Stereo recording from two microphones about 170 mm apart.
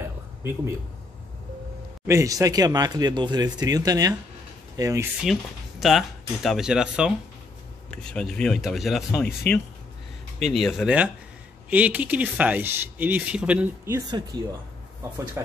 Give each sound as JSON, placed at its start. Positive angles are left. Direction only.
{"t": 2.0, "sound": "speech", "side_deg": -20}
{"t": 5.2, "sound": "speech", "side_deg": 0}
{"t": 10.4, "sound": "speech", "side_deg": 0}
{"t": 13.8, "sound": "speech", "side_deg": -20}